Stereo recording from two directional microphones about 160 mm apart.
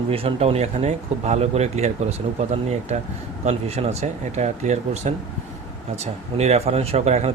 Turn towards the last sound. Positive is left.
turn(degrees=-45)  # may be behind; listen again after turning